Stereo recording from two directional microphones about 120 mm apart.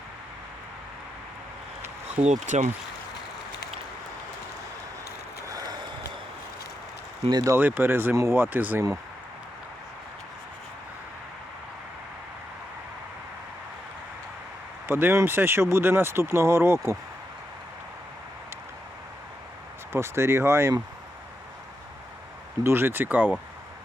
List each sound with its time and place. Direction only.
2.0 s speech: 70° right (ahead or behind)
5.5 s vehicle: 30° right (ahead or behind)
7.3 s speech: 35° right (ahead or behind)
7.5 s speech: 15° right (ahead or behind)
14.8 s speech: 20° right (ahead or behind)
19.9 s speech: 20° right (ahead or behind)
22.6 s speech: 20° right (ahead or behind)